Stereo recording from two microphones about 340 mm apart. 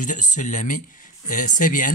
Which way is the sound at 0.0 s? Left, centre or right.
Left.